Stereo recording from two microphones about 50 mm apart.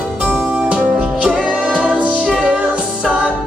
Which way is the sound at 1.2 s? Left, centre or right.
Centre.